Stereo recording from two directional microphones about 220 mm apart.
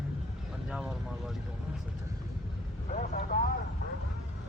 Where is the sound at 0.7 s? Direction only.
5° right (ahead or behind).